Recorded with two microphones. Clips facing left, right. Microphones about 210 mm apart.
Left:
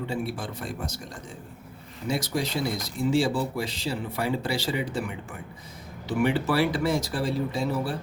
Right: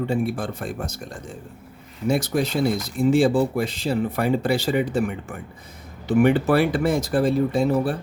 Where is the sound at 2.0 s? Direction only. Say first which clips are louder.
Right 6 dB; 55° right (ahead or behind).